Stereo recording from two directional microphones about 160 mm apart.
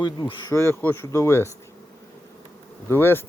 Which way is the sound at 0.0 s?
30° left (ahead or behind).